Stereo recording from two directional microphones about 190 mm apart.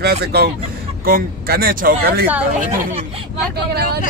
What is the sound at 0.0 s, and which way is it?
Speech, 60° right (ahead or behind).